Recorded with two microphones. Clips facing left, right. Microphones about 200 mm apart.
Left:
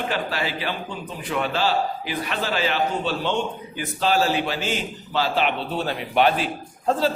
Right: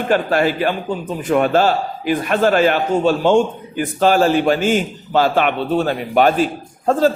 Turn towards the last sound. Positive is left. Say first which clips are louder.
# right 7 dB
turn(degrees=-45)  # may be behind; listen again after turning